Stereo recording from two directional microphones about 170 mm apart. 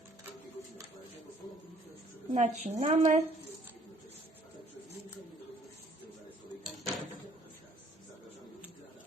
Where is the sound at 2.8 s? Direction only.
40° right (ahead or behind).